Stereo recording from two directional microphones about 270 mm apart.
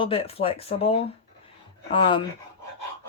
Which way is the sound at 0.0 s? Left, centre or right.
Centre.